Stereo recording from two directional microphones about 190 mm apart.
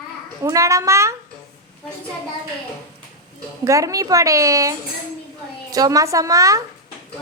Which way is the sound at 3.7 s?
15° right (ahead or behind).